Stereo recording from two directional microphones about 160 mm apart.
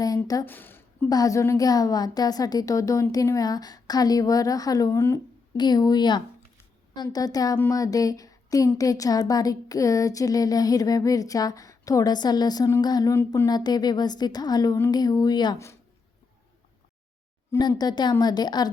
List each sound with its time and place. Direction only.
0.0 s a sound: 20° left (ahead or behind)
0.5 s a woman's voice: 10° left (ahead or behind)
17.5 s speech: 25° left (ahead or behind)